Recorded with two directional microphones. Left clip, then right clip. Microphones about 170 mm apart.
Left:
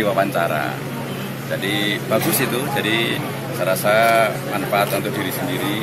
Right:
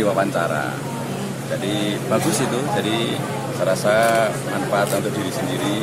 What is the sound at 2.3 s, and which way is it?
Speech, 15° right (ahead or behind).